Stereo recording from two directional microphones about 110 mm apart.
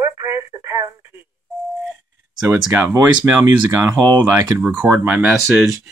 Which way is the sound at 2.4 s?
20° right (ahead or behind).